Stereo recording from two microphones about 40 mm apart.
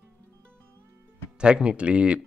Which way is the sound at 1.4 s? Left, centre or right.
Right.